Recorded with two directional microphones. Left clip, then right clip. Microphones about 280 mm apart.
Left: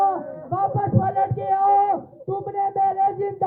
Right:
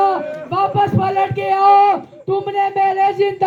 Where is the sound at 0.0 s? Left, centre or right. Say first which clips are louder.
Right 5 dB; right.